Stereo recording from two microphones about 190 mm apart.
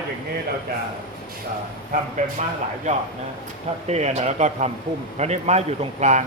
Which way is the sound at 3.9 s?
35° right (ahead or behind).